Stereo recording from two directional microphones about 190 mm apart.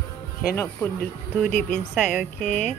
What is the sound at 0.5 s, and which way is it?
Speech, 10° left (ahead or behind).